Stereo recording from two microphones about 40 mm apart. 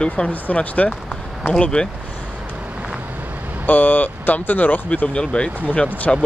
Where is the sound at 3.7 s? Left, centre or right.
Left.